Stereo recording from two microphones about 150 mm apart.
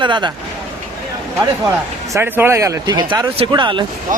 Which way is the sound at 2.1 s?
15° right (ahead or behind).